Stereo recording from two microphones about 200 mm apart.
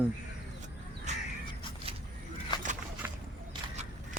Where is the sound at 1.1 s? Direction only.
35° right (ahead or behind).